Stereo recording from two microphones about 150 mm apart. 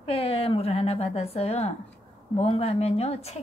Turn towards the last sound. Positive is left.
turn(degrees=45)  # may be behind; listen again after turning